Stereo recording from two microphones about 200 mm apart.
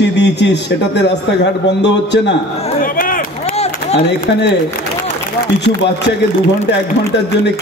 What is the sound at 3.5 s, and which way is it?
Run, 30° left (ahead or behind).